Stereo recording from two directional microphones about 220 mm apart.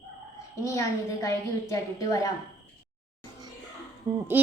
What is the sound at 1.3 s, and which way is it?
A woman's voice, 15° left (ahead or behind).